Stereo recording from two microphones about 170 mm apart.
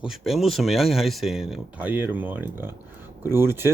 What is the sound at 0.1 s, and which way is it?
Speech, centre (ahead or behind).